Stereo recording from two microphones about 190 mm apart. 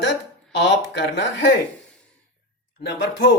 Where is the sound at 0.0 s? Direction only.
65° left (ahead or behind).